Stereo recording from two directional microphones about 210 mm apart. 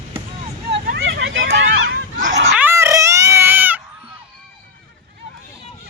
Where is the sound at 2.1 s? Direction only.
35° right (ahead or behind).